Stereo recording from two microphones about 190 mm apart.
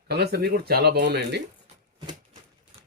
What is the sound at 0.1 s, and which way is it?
Speech, 55° right (ahead or behind).